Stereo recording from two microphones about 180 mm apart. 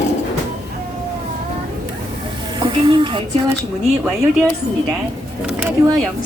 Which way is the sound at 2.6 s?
25° right (ahead or behind).